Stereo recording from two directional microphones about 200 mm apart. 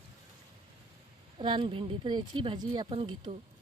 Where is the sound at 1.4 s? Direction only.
25° right (ahead or behind).